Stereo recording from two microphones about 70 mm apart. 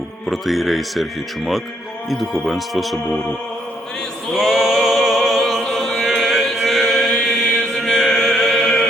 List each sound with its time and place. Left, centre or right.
0.3 s speech: centre
2.0 s speech: centre
4.4 s mantra: centre
7.8 s chant: centre